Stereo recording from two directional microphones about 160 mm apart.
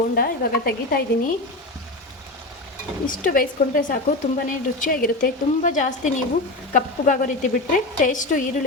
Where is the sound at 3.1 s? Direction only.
60° left (ahead or behind).